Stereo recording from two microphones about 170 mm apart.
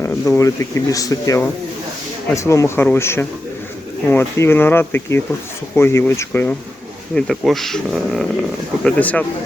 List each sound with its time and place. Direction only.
0.0 s speech: 20° left (ahead or behind)